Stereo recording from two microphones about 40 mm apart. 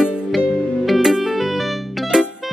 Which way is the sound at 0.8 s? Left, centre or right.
Centre.